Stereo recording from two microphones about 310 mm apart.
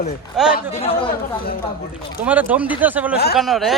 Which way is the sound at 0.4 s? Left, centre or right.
Centre.